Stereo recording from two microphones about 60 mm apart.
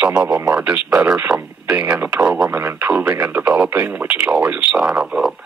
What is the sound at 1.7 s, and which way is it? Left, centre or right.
Speech, centre.